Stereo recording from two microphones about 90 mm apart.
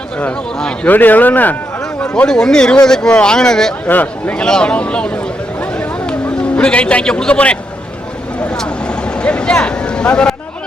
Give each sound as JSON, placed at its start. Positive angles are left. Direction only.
{"t": 0.2, "sound": "speech", "side_deg": 15}
{"t": 3.8, "sound": "speech", "side_deg": 20}
{"t": 8.4, "sound": "vehicle", "side_deg": 10}